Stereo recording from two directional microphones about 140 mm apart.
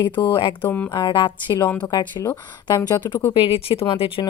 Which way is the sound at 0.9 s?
30° left (ahead or behind).